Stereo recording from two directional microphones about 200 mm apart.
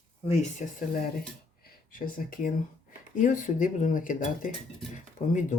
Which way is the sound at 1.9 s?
45° left (ahead or behind).